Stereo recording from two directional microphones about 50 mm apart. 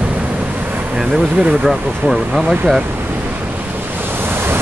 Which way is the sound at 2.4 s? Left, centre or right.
Right.